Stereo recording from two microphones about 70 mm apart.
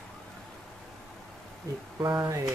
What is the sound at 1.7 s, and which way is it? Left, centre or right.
Speech, right.